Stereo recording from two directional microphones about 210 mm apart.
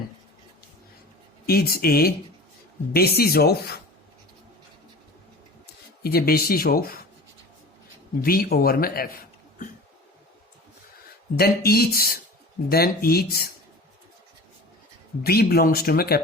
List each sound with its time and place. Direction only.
1.5 s speech: 45° left (ahead or behind)
6.0 s speech: 45° left (ahead or behind)
8.2 s speech: 45° left (ahead or behind)
11.3 s speech: 45° left (ahead or behind)
15.2 s speech: 45° left (ahead or behind)